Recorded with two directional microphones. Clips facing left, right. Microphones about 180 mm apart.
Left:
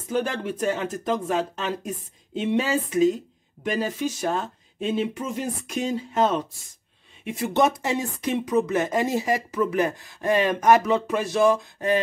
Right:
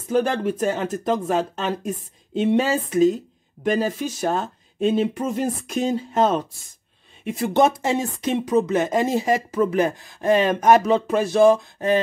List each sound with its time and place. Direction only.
0.1 s speech: 35° right (ahead or behind)
2.4 s speech: 35° right (ahead or behind)